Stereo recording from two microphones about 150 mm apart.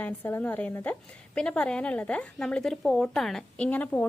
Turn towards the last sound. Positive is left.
turn(degrees=10)  # may be behind; listen again after turning